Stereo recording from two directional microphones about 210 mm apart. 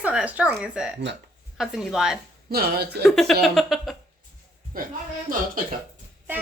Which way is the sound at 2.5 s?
45° right (ahead or behind).